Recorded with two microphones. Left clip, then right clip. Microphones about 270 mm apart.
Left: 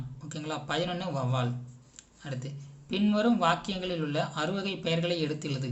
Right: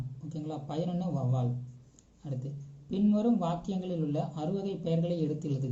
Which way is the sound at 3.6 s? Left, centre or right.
Centre.